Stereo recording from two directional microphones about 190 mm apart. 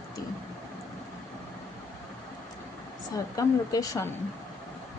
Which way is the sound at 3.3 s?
15° left (ahead or behind).